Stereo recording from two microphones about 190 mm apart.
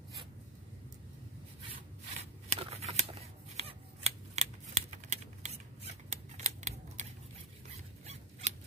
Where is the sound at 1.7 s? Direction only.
35° right (ahead or behind).